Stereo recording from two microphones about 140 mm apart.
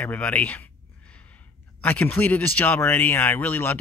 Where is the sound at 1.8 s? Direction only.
10° left (ahead or behind).